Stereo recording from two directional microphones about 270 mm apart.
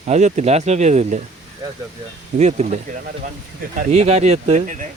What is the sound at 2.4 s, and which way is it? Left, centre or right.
Speech, right.